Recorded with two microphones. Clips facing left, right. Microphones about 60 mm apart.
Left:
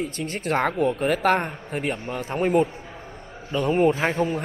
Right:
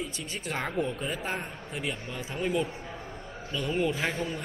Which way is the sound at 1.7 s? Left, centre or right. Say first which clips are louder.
Left 7 dB; left.